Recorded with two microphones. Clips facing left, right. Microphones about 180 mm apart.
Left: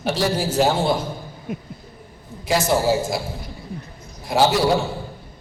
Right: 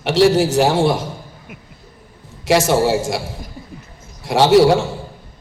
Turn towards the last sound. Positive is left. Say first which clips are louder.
# right 6 dB
turn(degrees=-80)